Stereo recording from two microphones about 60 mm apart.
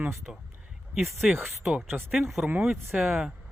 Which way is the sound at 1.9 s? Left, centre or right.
Right.